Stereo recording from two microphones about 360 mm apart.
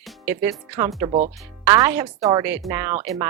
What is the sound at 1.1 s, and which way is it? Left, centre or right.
Speech, centre.